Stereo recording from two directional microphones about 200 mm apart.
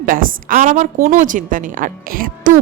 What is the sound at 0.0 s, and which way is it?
A woman's voice, 45° right (ahead or behind).